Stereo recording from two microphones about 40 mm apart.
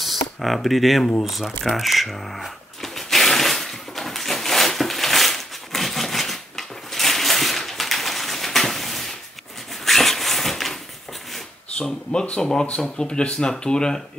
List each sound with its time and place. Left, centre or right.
0.0 s music: centre
1.2 s speech: centre
1.6 s a sound: centre
12.1 s speech: centre